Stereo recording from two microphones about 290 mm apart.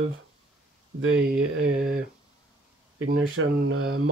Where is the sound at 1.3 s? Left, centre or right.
Right.